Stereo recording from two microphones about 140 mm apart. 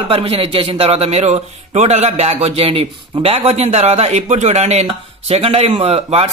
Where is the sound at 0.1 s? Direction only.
40° right (ahead or behind).